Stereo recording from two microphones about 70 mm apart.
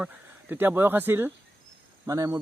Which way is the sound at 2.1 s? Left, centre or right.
Right.